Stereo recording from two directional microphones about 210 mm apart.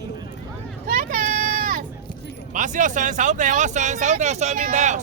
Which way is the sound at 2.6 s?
35° right (ahead or behind).